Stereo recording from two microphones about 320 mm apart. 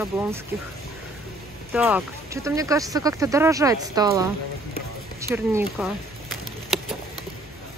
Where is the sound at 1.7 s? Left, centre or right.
Centre.